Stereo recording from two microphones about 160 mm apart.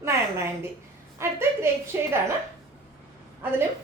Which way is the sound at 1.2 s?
15° right (ahead or behind).